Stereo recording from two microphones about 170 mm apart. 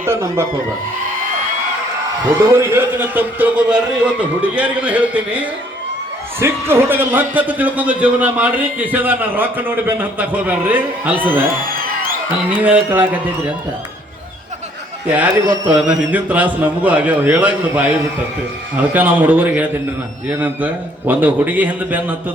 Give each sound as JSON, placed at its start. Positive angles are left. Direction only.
{"t": 0.0, "sound": "a man's voice", "side_deg": -15}
{"t": 2.5, "sound": "a man's voice", "side_deg": -15}
{"t": 12.5, "sound": "a man's voice", "side_deg": -10}
{"t": 15.1, "sound": "a man's voice", "side_deg": -10}
{"t": 18.9, "sound": "a man's voice", "side_deg": -10}
{"t": 21.1, "sound": "a man's voice", "side_deg": -10}